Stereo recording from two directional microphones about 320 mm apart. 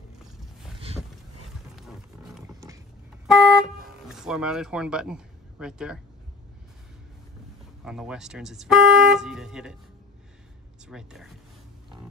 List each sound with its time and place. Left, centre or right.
0.7 s vehicle: centre
2.4 s roaring cats: centre
3.3 s car: centre
7.8 s speech: centre
10.9 s speech: centre